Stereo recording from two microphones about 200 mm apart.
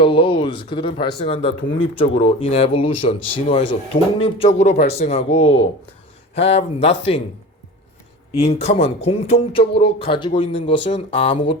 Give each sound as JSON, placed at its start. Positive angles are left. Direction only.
{"t": 0.0, "sound": "speech", "side_deg": 25}
{"t": 8.4, "sound": "speech", "side_deg": 30}